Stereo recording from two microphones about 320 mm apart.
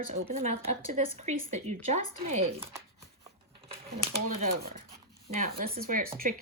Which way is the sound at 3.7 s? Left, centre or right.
Centre.